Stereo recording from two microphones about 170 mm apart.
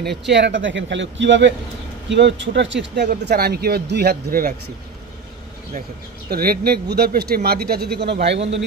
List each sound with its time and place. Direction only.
0.3 s a man's voice: 90° right; by 4.6 s 60° right (ahead or behind)
6.3 s speech: 65° right (ahead or behind); by 8.4 s 85° right